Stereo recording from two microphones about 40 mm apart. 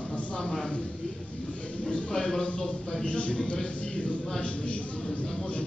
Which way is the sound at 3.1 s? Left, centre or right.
Left.